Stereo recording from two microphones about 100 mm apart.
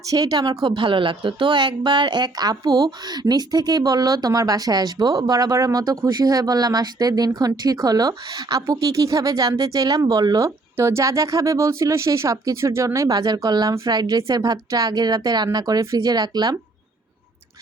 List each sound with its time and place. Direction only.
0.0 s speech: 35° right (ahead or behind)
0.6 s speech: 55° right (ahead or behind); by 13.1 s 30° right (ahead or behind)
13.1 s speech: 45° right (ahead or behind)